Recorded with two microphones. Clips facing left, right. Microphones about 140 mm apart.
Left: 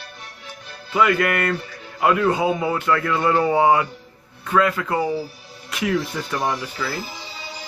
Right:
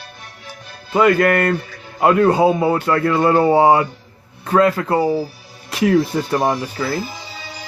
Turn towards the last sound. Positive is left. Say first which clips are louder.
# right 5 dB
turn(degrees=-40)  # may be behind; listen again after turning